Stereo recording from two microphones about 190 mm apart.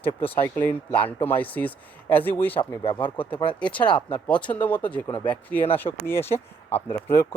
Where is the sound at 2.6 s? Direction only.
25° left (ahead or behind).